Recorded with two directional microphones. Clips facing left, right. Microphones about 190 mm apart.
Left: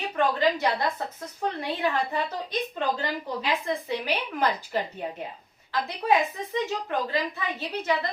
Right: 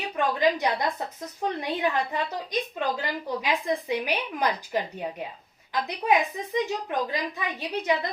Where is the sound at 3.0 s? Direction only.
15° right (ahead or behind).